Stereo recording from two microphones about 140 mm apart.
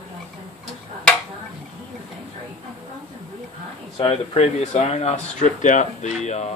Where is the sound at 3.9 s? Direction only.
45° left (ahead or behind).